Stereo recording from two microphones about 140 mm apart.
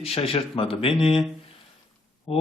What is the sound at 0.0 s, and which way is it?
Speech, 45° left (ahead or behind).